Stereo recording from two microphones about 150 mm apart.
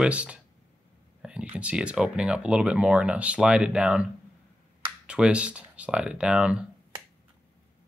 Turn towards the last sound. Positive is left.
turn(degrees=-5)  # may be behind; listen again after turning